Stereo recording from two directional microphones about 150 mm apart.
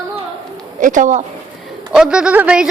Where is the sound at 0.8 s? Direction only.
60° right (ahead or behind).